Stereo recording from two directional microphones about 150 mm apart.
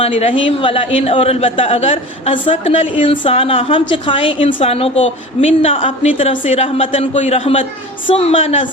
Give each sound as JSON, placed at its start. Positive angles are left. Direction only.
{"t": 0.0, "sound": "a man's voice", "side_deg": 40}